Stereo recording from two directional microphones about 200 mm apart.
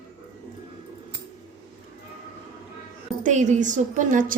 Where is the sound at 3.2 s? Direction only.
40° right (ahead or behind).